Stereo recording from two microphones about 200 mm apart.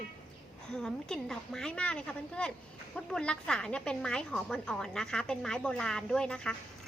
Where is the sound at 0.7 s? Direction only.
Centre (ahead or behind).